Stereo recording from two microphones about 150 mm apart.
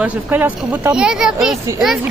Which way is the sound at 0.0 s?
10° right (ahead or behind).